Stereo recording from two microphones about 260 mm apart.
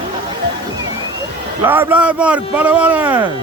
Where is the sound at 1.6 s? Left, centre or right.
Centre.